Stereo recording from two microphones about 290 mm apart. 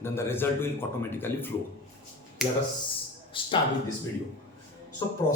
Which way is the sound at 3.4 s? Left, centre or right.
Centre.